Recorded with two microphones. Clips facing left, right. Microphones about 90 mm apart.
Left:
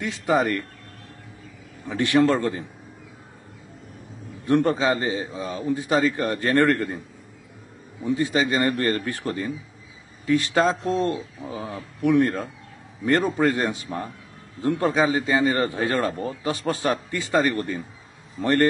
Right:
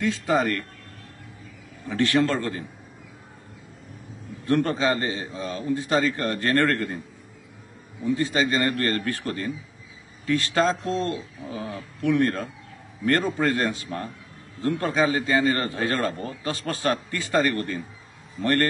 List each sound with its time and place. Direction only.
0.0 s a man's voice: 20° left (ahead or behind)
1.9 s a man's voice: 15° left (ahead or behind)
4.5 s a man's voice: 20° left (ahead or behind)
8.1 s a man's voice: 15° left (ahead or behind)
12.0 s a man's voice: 15° left (ahead or behind)